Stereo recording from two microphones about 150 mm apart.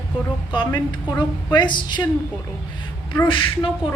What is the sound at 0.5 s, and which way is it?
A woman's voice, 35° left (ahead or behind).